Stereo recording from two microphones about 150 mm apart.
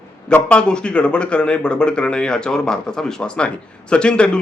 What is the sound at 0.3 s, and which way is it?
A man's voice, 5° left (ahead or behind).